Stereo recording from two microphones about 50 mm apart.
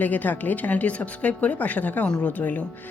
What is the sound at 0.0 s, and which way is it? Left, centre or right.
A woman's voice, left.